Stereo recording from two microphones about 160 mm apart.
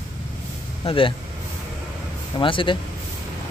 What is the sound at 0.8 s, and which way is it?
Speech, 35° left (ahead or behind).